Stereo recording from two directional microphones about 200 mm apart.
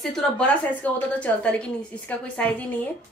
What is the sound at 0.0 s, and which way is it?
A woman's voice, 5° left (ahead or behind).